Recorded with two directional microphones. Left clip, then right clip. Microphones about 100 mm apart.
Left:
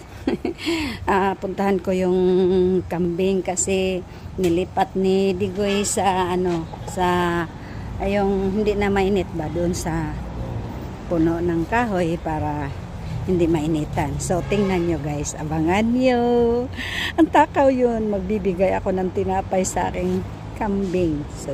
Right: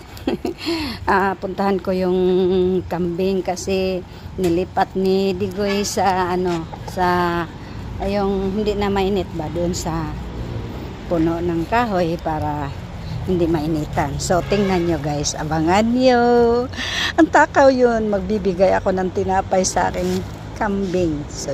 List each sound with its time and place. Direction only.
0.3 s speech: 25° left (ahead or behind)
2.1 s music: 40° left (ahead or behind)
2.9 s speech: 20° left (ahead or behind)
11.1 s speech: 15° left (ahead or behind)
14.7 s speech: 5° left (ahead or behind); by 19.6 s 30° left (ahead or behind)
19.7 s music: 30° left (ahead or behind)
20.6 s speech: 30° left (ahead or behind)